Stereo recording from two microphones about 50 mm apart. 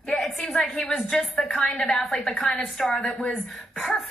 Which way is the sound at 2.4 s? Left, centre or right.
Centre.